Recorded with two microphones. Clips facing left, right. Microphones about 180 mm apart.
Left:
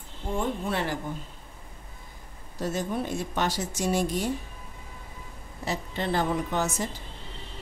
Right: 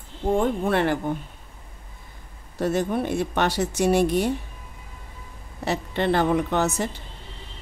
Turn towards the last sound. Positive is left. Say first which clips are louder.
# right 5 dB
turn(degrees=-65)  # may be behind; listen again after turning